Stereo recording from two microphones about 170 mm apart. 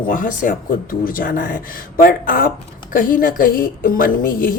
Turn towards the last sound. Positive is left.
turn(degrees=55)  # may be behind; listen again after turning